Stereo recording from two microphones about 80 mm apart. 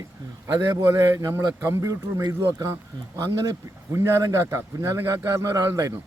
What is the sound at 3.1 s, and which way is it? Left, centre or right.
Speech, right.